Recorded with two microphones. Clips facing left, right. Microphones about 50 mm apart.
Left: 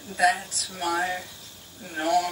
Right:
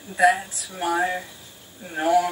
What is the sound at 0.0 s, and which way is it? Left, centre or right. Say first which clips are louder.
Speech: right 4 dB; centre.